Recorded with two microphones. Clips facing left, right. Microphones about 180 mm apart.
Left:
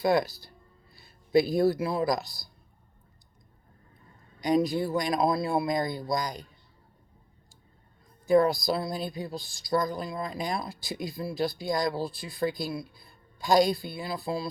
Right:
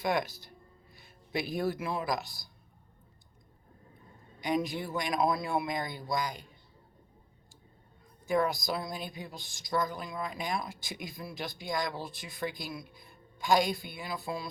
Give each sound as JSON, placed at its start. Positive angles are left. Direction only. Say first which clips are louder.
{"t": 0.0, "sound": "speech", "louder": "left 6 dB", "side_deg": 35}
{"t": 4.4, "sound": "speech", "louder": "left 7 dB", "side_deg": 40}
{"t": 8.3, "sound": "speech", "louder": "left 7 dB", "side_deg": 35}